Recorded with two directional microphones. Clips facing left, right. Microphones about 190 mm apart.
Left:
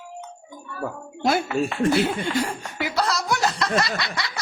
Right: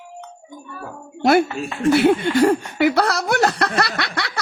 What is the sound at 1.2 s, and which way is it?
A woman's voice, 65° right (ahead or behind).